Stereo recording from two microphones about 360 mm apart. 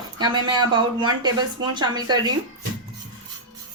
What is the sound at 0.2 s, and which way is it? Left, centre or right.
Speech, centre.